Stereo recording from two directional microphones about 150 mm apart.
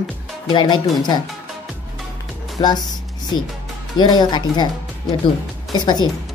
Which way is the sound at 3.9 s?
30° left (ahead or behind).